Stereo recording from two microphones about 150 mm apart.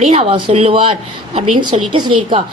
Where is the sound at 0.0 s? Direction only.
45° right (ahead or behind).